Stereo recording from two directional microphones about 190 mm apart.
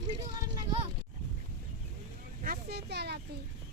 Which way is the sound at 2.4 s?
55° right (ahead or behind).